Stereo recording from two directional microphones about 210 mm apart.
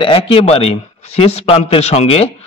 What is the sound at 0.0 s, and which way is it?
Speech, 25° left (ahead or behind).